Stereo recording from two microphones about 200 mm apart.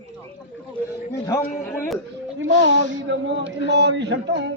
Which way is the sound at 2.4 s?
75° right (ahead or behind).